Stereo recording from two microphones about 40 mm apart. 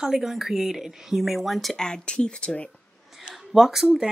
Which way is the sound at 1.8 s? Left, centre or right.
Left.